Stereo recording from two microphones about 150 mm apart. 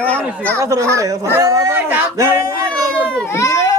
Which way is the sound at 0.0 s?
10° left (ahead or behind).